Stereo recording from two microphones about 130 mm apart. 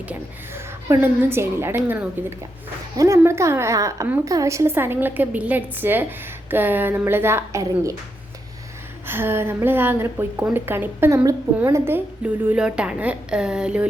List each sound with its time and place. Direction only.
0.0 s a woman's voice: 15° right (ahead or behind)
9.0 s a woman's voice: 15° right (ahead or behind)